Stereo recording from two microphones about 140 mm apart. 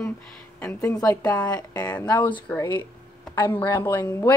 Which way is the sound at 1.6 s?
30° left (ahead or behind).